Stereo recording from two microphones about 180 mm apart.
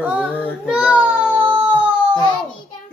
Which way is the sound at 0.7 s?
5° right (ahead or behind).